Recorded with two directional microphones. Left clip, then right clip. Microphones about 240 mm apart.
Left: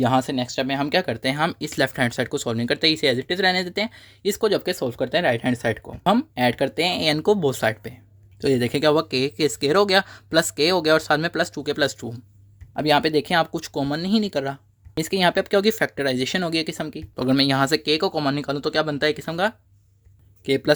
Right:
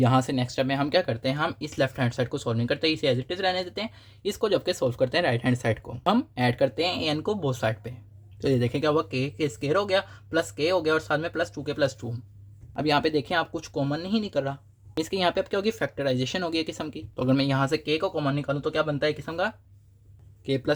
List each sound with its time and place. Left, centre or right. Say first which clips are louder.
0.0 s speech: left 3 dB; centre; by 12.0 s left
12.7 s speech: left 5 dB; left